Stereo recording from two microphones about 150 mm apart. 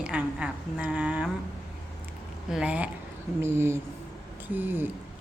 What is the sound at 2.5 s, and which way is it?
Speech, 5° right (ahead or behind).